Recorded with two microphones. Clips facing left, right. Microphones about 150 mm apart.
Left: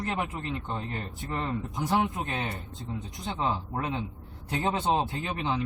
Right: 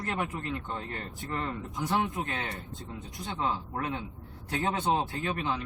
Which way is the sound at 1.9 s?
20° left (ahead or behind).